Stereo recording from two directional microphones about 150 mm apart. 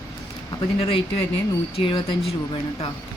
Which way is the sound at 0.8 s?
35° left (ahead or behind).